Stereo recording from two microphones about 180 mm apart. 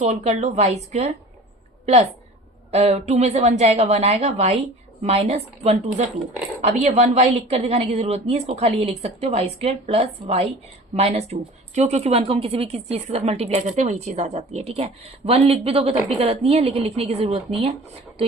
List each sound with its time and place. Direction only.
0.0 s speech: 40° right (ahead or behind)
2.7 s speech: 35° right (ahead or behind)